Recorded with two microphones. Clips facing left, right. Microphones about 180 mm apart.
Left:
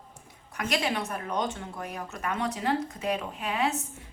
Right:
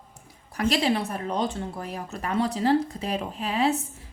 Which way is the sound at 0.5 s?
30° right (ahead or behind).